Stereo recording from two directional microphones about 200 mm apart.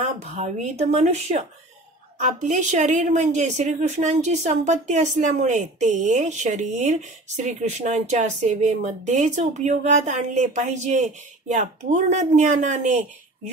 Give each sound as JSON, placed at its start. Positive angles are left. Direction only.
{"t": 0.0, "sound": "a woman's voice", "side_deg": -35}